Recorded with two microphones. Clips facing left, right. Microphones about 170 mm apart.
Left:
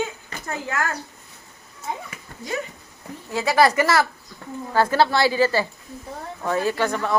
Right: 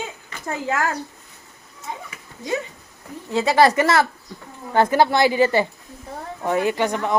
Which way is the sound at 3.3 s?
25° right (ahead or behind).